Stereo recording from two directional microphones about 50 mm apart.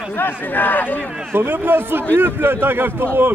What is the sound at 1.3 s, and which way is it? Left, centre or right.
Speech, right.